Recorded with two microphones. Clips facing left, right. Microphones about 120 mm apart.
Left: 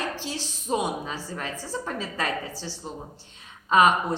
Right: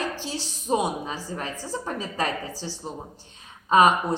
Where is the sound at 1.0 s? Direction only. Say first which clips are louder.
Right 1 dB; 25° right (ahead or behind).